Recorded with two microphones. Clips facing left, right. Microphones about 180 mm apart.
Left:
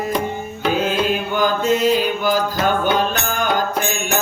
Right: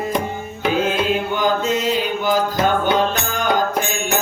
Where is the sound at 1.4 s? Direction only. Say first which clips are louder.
Left 2 dB; 20° right (ahead or behind).